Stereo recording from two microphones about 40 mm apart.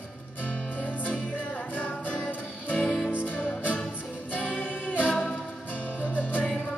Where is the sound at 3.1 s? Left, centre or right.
Left.